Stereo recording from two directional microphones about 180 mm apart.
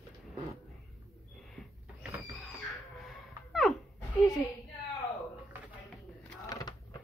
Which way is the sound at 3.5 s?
Centre (ahead or behind).